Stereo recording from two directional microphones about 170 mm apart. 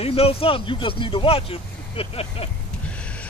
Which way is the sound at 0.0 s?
35° left (ahead or behind).